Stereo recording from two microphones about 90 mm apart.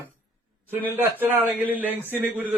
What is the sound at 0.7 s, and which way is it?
A man's voice, 20° right (ahead or behind).